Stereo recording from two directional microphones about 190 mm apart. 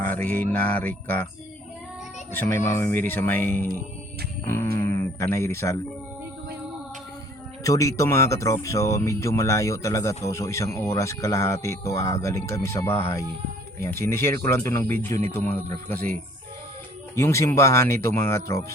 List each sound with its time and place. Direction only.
0.1 s speech: 10° left (ahead or behind)
2.3 s speech: 10° left (ahead or behind)
4.4 s guitar: 10° left (ahead or behind)
5.3 s speech: 15° left (ahead or behind)
7.6 s speech: 15° left (ahead or behind)
17.2 s speech: 15° left (ahead or behind)